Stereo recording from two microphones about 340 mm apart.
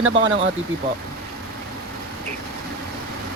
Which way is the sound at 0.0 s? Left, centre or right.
Right.